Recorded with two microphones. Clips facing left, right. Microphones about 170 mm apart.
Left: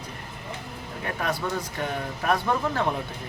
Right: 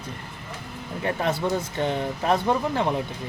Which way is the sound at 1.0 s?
25° right (ahead or behind).